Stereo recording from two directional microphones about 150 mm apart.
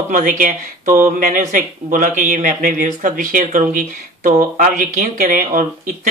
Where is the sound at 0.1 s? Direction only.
60° right (ahead or behind).